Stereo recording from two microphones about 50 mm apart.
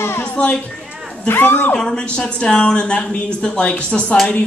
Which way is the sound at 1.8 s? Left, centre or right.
Centre.